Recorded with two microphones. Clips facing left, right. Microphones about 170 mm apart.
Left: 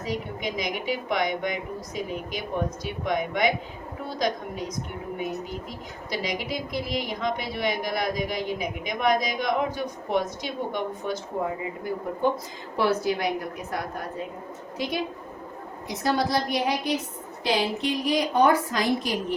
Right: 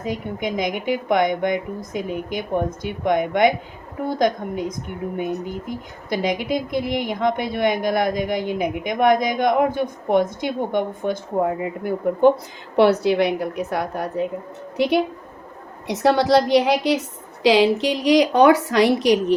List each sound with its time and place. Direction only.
0.0 s a woman's voice: 55° right (ahead or behind)
12.7 s a woman's voice: 70° right (ahead or behind)